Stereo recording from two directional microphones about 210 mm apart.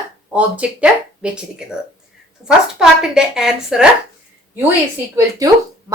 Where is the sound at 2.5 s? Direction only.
5° right (ahead or behind).